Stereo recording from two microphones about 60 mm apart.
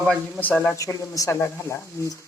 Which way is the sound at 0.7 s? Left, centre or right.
Left.